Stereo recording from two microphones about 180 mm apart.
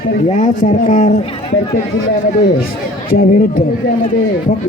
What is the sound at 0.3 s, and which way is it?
Speech, 40° left (ahead or behind).